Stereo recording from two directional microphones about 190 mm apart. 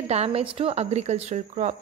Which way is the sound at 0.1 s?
30° right (ahead or behind).